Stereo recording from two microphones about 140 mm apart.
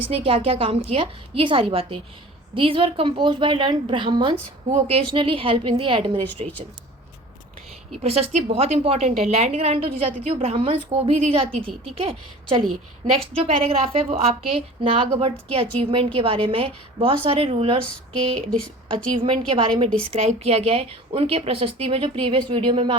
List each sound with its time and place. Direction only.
0.0 s a woman's voice: 45° right (ahead or behind)
4.7 s a woman's voice: 45° right (ahead or behind)
8.0 s a woman's voice: 50° right (ahead or behind)
18.3 s speech: 5° left (ahead or behind)
19.2 s a woman's voice: 35° right (ahead or behind)